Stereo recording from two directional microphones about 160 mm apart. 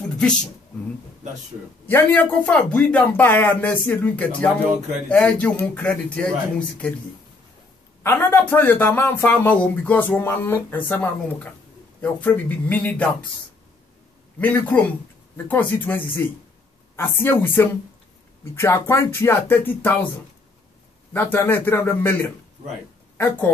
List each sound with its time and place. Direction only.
1.9 s speech: 10° left (ahead or behind)
8.0 s speech: 15° left (ahead or behind)
14.4 s speech: 10° left (ahead or behind)
21.1 s speech: 10° left (ahead or behind)